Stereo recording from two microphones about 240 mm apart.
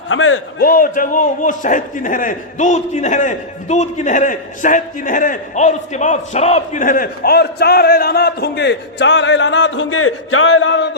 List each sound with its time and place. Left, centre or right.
0.1 s a man's voice: left
0.6 s a man's voice: left